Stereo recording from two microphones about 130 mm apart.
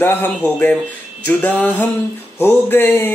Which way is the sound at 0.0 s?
15° left (ahead or behind).